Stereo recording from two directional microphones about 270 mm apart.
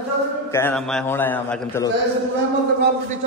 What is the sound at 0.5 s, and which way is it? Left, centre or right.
A man's voice, centre.